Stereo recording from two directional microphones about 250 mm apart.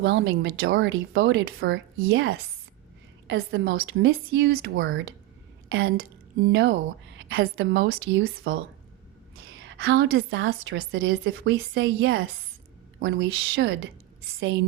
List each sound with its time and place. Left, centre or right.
0.0 s a woman's voice: right
3.2 s a woman's voice: right
6.4 s a woman's voice: right